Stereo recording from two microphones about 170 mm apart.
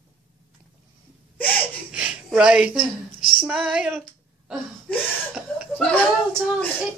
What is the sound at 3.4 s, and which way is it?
Female singing, 5° right (ahead or behind).